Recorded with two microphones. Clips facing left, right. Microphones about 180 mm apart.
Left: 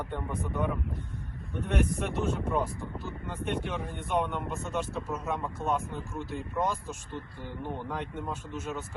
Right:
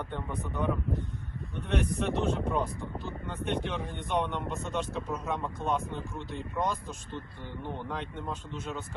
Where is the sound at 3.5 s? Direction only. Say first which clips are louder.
Even; 5° left (ahead or behind).